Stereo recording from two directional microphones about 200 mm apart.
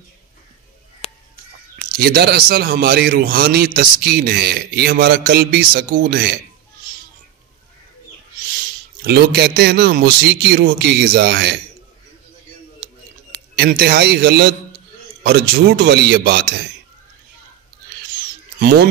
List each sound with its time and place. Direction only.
2.0 s a man's voice: 50° right (ahead or behind)
9.0 s a man's voice: 55° right (ahead or behind)
13.3 s a man's voice: 50° right (ahead or behind)
18.6 s speech: 55° right (ahead or behind)